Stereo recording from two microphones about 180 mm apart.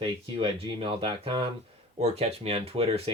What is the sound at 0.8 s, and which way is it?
Speech, 30° right (ahead or behind).